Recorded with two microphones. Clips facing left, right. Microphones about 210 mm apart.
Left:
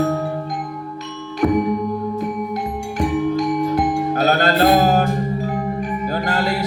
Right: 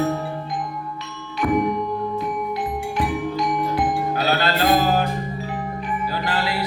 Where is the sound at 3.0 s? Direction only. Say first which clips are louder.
Left 6 dB; 45° left (ahead or behind).